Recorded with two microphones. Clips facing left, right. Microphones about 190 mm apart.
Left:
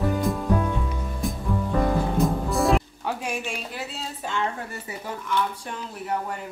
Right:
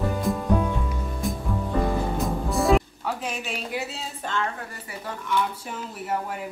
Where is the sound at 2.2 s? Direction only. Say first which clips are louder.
Left 2 dB; centre (ahead or behind).